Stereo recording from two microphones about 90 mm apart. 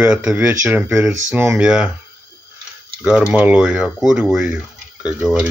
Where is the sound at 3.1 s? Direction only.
10° right (ahead or behind).